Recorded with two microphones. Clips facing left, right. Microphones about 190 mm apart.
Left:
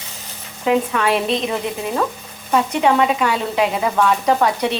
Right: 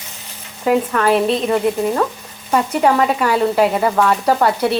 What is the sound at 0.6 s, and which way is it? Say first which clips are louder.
Speech: right 2 dB; centre (ahead or behind).